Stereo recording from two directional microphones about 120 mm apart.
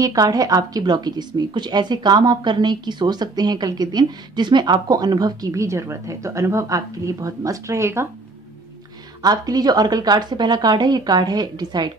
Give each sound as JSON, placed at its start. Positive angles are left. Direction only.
{"t": 0.0, "sound": "speech", "side_deg": -30}
{"t": 9.2, "sound": "speech", "side_deg": -35}